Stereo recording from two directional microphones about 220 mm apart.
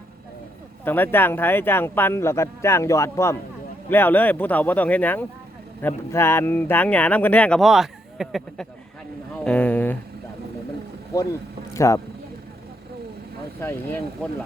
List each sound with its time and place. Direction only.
0.9 s speech: 10° left (ahead or behind)
11.1 s speech: 15° left (ahead or behind)
13.6 s speech: 10° left (ahead or behind)